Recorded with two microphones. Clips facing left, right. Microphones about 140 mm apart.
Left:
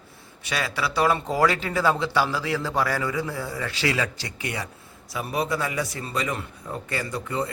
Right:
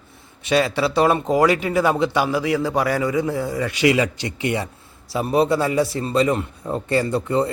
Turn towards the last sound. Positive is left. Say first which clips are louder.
# right 8 dB
turn(degrees=-35)  # may be behind; listen again after turning